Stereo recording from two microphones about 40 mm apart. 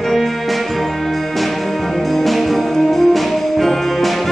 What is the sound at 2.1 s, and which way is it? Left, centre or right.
Music, centre.